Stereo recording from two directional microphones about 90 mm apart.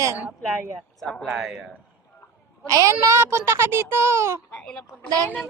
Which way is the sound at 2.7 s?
35° right (ahead or behind).